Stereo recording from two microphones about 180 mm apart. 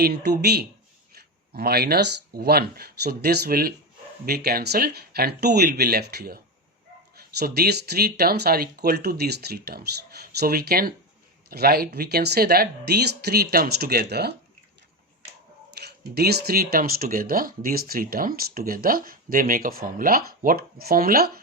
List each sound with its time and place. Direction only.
0.0 s speech: 65° right (ahead or behind)
15.8 s speech: 60° right (ahead or behind)